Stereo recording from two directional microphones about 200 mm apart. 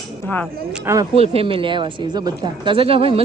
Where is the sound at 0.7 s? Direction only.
15° right (ahead or behind).